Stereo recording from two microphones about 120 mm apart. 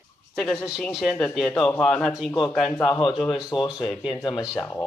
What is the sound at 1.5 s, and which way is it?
Speech, 10° left (ahead or behind).